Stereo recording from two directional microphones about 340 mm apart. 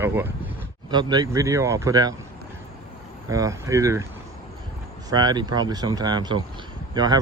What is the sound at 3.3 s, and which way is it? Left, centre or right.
Speech, centre.